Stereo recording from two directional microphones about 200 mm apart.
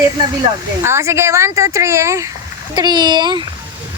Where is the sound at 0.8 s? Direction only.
15° right (ahead or behind).